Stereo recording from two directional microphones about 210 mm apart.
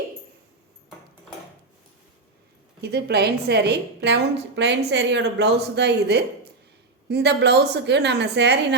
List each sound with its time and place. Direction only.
2.8 s a woman's voice: 50° right (ahead or behind)